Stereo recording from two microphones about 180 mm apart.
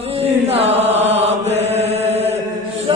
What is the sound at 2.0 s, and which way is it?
Mantra, 35° right (ahead or behind).